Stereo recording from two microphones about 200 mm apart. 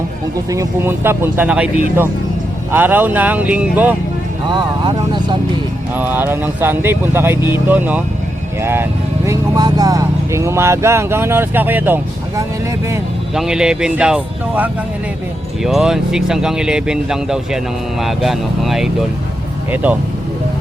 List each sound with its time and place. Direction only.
0.5 s speech: 15° right (ahead or behind)
4.5 s speech: 20° right (ahead or behind)
5.9 s speech: 10° right (ahead or behind)
13.3 s speech: 5° right (ahead or behind)